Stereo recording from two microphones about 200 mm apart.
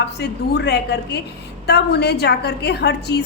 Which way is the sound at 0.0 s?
55° left (ahead or behind).